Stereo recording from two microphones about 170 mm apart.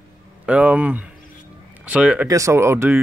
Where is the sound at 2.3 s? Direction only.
20° right (ahead or behind).